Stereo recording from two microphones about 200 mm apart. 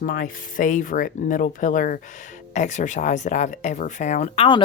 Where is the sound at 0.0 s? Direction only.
45° left (ahead or behind).